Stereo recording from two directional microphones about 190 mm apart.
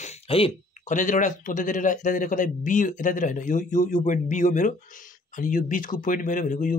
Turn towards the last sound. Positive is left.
turn(degrees=45)  # may be behind; listen again after turning